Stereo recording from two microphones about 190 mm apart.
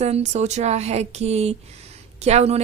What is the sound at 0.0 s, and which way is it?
A woman's voice, 35° right (ahead or behind).